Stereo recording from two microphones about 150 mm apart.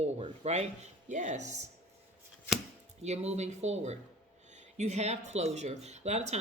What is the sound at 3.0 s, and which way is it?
Speech, 45° right (ahead or behind).